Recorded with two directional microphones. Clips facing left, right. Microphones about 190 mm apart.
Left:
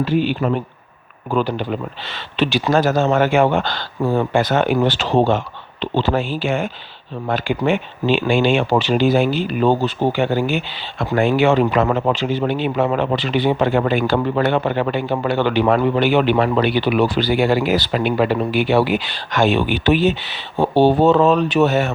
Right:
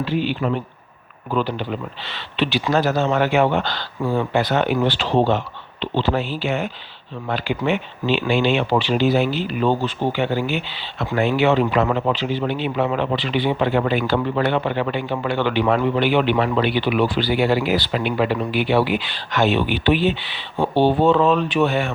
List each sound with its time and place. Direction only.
0.0 s speech: 45° left (ahead or behind)